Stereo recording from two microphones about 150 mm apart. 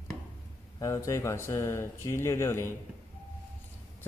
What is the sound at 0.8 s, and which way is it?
Speech, 20° left (ahead or behind).